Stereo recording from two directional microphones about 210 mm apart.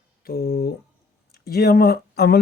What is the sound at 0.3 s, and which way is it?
Speech, 45° left (ahead or behind).